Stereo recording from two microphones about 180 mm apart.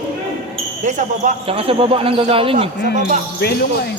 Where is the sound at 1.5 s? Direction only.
30° right (ahead or behind).